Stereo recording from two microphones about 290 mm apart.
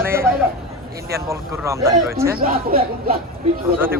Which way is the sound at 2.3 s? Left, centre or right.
Right.